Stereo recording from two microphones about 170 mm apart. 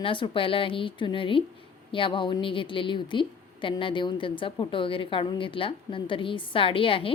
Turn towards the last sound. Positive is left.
turn(degrees=30)  # may be behind; listen again after turning